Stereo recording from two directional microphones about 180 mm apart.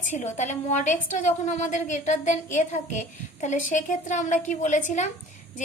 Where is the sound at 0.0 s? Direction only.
45° left (ahead or behind).